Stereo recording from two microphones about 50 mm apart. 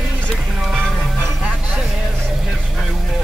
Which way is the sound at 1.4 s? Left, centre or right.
Right.